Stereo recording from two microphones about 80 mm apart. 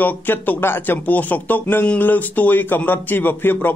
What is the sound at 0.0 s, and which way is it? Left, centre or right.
A man's voice, left.